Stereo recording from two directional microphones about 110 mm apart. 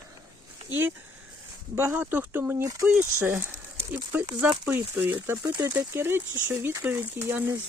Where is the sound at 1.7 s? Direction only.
20° right (ahead or behind).